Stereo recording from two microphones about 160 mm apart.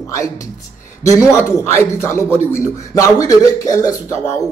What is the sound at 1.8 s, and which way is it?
A man's voice, 15° left (ahead or behind).